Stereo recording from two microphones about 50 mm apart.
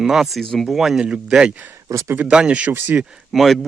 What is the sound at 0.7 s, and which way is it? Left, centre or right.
Speech, centre.